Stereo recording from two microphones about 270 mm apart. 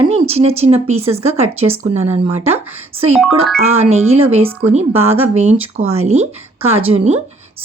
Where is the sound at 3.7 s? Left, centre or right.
Right.